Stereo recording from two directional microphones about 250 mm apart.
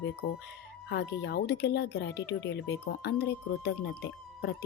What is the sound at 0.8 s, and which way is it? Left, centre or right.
Speech, left.